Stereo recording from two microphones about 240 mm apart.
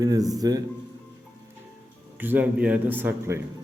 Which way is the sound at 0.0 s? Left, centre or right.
Centre.